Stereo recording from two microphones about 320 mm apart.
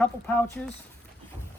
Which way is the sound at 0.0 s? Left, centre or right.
Centre.